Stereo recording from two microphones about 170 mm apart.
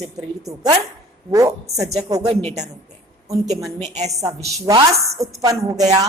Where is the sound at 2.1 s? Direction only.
30° right (ahead or behind).